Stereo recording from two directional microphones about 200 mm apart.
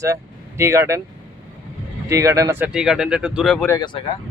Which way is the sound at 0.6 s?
15° right (ahead or behind).